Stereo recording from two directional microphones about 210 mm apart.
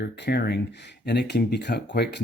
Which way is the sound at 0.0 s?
50° left (ahead or behind).